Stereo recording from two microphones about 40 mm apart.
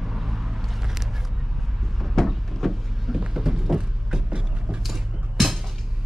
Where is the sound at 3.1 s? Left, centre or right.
Centre.